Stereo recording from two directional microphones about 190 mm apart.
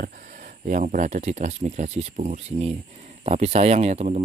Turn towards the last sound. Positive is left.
turn(degrees=-35)  # may be behind; listen again after turning